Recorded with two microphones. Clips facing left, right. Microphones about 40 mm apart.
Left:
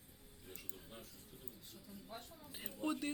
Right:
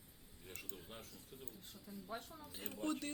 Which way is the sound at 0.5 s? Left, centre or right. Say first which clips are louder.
Right 2 dB; right.